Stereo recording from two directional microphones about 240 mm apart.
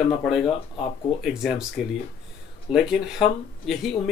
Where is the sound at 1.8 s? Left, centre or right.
Centre.